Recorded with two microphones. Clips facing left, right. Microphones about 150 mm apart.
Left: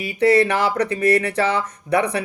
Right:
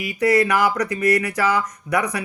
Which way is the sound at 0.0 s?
30° left (ahead or behind).